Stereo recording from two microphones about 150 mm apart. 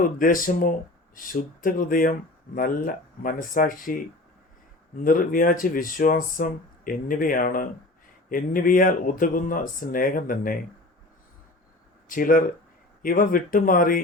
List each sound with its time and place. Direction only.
0.0 s speech: 65° left (ahead or behind)
5.0 s speech: 65° left (ahead or behind)
12.0 s speech: 65° left (ahead or behind)